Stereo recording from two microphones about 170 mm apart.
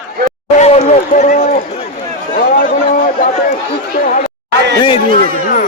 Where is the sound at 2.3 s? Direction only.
55° left (ahead or behind).